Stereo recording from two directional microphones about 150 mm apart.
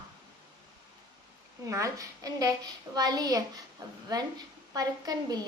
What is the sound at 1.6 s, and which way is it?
A woman's voice, 20° right (ahead or behind).